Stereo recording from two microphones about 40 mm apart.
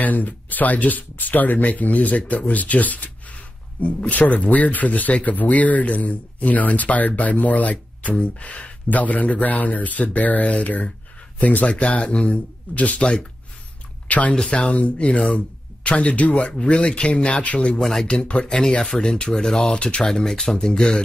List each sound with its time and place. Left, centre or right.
0.0 s speech: left
11.6 s speech: left
14.0 s a sound: left
14.3 s speech: left